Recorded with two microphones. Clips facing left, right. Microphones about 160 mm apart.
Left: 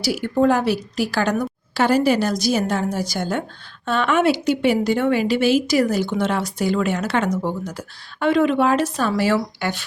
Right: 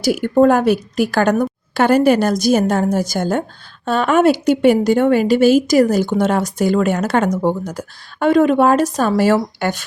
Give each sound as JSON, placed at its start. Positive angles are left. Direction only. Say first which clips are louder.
{"t": 0.0, "sound": "a woman's voice", "louder": "right 6 dB", "side_deg": -50}